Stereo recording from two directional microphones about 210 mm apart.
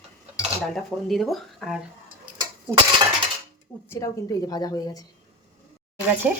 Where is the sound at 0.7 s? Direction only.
Centre (ahead or behind).